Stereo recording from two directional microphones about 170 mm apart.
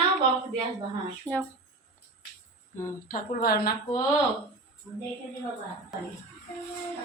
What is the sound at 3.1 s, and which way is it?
Speech, 65° left (ahead or behind).